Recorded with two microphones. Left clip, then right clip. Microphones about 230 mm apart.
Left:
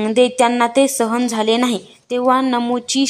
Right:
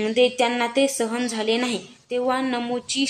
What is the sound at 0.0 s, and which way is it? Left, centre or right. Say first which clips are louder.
A woman's voice: left 5 dB; left.